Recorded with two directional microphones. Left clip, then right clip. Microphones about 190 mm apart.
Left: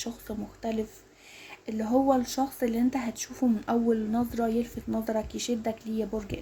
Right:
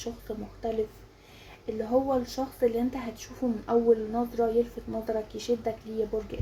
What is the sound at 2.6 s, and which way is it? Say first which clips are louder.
Speech: right 1 dB; 55° left (ahead or behind).